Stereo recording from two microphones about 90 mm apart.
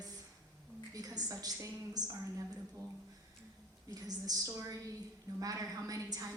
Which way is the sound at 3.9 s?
45° right (ahead or behind).